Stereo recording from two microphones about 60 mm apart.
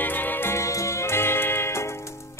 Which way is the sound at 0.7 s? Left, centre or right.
Left.